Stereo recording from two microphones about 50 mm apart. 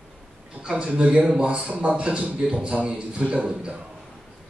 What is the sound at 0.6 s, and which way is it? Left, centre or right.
A man's voice, centre.